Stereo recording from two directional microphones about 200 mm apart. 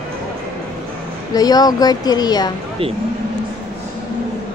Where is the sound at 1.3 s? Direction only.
20° left (ahead or behind).